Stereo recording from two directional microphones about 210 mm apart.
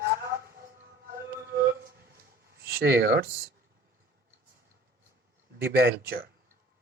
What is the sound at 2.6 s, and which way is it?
Speech, 45° right (ahead or behind).